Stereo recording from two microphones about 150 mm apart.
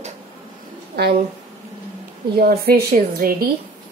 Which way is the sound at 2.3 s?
90° right.